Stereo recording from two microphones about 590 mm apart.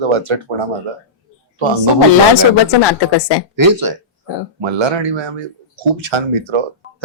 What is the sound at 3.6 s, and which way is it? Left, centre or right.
Speech, right.